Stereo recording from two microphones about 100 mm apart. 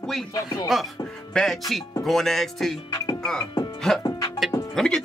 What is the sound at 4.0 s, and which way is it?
Music, 35° left (ahead or behind).